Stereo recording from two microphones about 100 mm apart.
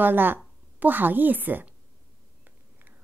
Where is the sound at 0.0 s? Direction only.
20° right (ahead or behind).